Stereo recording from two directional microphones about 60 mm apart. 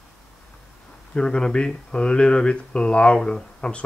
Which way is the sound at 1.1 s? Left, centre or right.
Centre.